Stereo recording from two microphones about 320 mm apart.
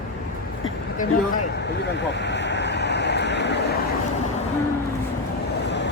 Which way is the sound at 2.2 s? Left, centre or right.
Left.